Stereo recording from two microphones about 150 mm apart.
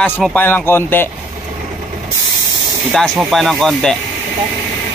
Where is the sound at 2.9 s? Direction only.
Centre (ahead or behind).